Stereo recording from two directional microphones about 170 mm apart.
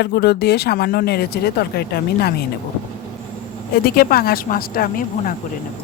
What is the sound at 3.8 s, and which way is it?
Speech, 60° left (ahead or behind).